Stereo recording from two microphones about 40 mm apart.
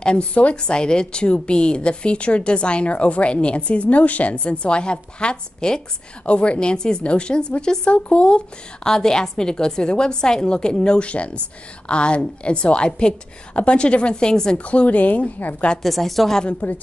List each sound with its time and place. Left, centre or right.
0.0 s a woman's voice: left
7.9 s a woman's voice: left
8.8 s a woman's voice: centre
14.6 s speech: left
15.8 s a woman's voice: centre
16.6 s a woman's voice: left